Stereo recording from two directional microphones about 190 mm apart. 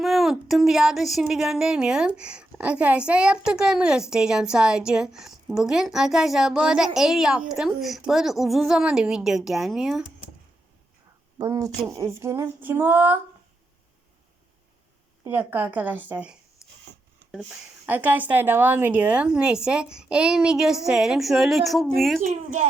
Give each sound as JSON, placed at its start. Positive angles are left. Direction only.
{"t": 0.0, "sound": "speech", "side_deg": 0}
{"t": 11.3, "sound": "a woman's voice", "side_deg": -15}
{"t": 15.2, "sound": "a woman's voice", "side_deg": -10}
{"t": 16.6, "sound": "a sound", "side_deg": -5}
{"t": 17.3, "sound": "speech", "side_deg": -5}
{"t": 22.3, "sound": "speech", "side_deg": -40}